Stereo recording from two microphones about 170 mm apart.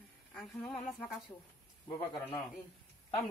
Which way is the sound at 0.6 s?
10° left (ahead or behind).